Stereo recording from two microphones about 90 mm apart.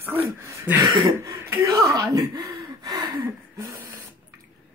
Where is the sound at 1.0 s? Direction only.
35° right (ahead or behind).